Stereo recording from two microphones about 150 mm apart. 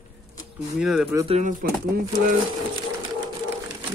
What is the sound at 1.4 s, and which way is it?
Speech, 65° right (ahead or behind).